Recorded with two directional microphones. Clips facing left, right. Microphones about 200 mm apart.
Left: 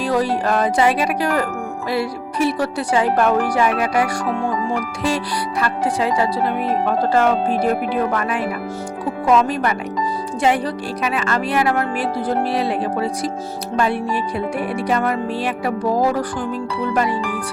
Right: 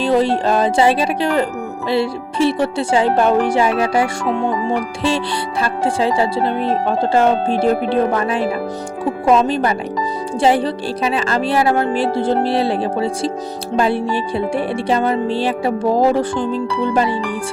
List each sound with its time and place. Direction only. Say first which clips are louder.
0.0 s speech: right 4 dB; 25° right (ahead or behind)